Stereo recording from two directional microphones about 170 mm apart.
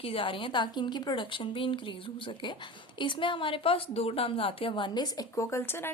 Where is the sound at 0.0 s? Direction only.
30° left (ahead or behind).